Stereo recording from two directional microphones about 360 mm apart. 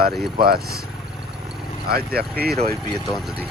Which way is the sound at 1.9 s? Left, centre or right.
Right.